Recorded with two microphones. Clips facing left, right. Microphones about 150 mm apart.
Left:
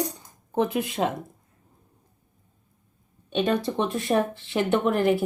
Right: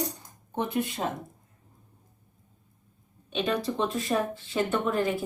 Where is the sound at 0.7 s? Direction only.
85° left.